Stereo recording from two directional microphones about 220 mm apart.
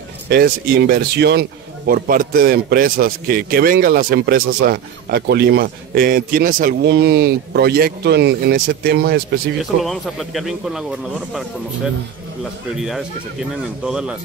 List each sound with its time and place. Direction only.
0.3 s a man's voice: 45° right (ahead or behind)
9.8 s speech: centre (ahead or behind)
12.8 s speech: centre (ahead or behind)